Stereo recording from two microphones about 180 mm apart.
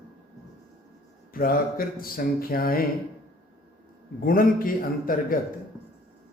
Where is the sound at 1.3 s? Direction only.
55° left (ahead or behind).